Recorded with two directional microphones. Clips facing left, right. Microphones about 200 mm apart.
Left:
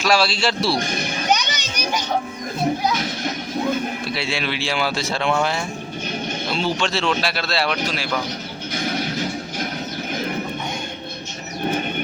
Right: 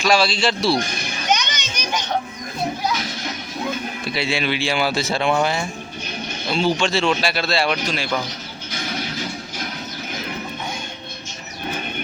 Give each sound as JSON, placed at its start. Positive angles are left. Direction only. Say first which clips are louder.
{"t": 0.0, "sound": "speech", "louder": "right 1 dB", "side_deg": 5}
{"t": 1.3, "sound": "children playing", "louder": "even", "side_deg": 10}
{"t": 4.0, "sound": "speech", "louder": "right 2 dB", "side_deg": 0}